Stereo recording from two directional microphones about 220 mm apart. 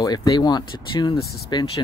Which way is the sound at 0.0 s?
15° left (ahead or behind).